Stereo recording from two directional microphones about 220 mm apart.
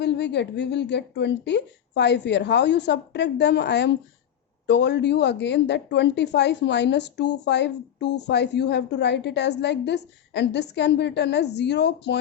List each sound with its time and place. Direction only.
0.0 s speech: 50° left (ahead or behind)